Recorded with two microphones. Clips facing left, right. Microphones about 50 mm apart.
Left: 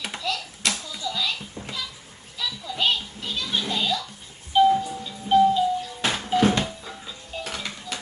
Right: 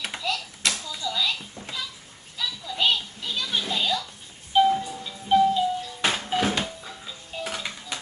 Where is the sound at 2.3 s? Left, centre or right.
Centre.